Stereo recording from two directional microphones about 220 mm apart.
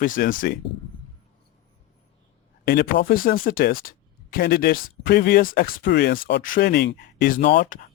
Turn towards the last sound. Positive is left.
turn(degrees=35)  # may be behind; listen again after turning